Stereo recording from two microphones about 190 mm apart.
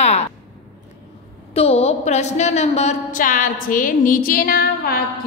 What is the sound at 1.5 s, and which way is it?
A woman's voice, 30° left (ahead or behind).